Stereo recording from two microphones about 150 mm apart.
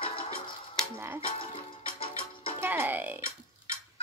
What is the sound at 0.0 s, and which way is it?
Music, 40° left (ahead or behind).